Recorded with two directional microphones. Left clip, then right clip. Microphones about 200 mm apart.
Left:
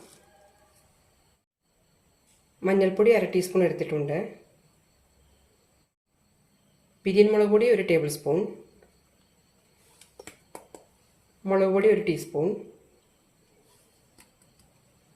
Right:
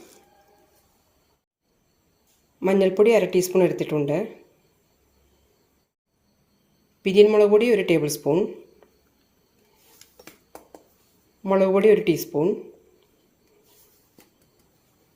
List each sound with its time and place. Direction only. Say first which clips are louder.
2.6 s speech: right 4 dB; 40° right (ahead or behind)
7.0 s speech: right 5 dB; 35° right (ahead or behind)
11.4 s speech: right 4 dB; 35° right (ahead or behind)